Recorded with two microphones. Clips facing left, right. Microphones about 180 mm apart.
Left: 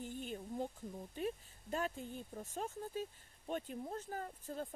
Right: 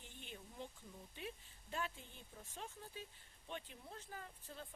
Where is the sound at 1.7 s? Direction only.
45° left (ahead or behind).